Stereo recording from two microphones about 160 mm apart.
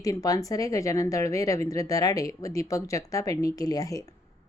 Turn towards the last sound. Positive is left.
turn(degrees=20)  # may be behind; listen again after turning